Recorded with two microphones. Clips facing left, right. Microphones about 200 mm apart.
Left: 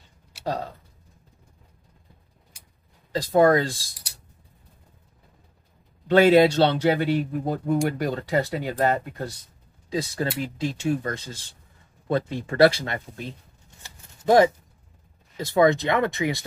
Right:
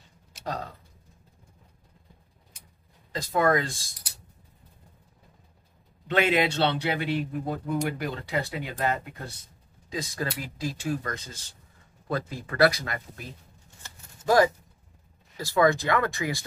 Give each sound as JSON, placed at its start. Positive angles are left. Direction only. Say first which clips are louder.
{"t": 3.1, "sound": "speech", "louder": "left 6 dB", "side_deg": 30}
{"t": 6.0, "sound": "speech", "louder": "left 8 dB", "side_deg": 40}
{"t": 13.8, "sound": "shuffling cards", "louder": "left 4 dB", "side_deg": 25}
{"t": 15.3, "sound": "speech", "louder": "left 3 dB", "side_deg": 20}